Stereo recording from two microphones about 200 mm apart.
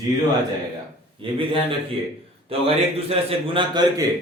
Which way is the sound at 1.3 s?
25° right (ahead or behind).